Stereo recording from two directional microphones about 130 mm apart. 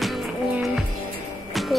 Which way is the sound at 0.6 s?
Centre (ahead or behind).